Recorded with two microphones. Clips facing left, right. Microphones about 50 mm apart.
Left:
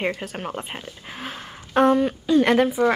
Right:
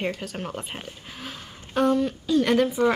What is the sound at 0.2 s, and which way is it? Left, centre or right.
Speech, centre.